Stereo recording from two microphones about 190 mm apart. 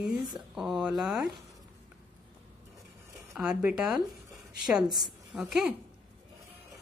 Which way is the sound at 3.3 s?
5° right (ahead or behind).